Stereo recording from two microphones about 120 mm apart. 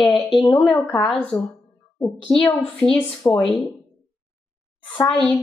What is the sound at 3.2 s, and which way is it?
Speech, 25° left (ahead or behind).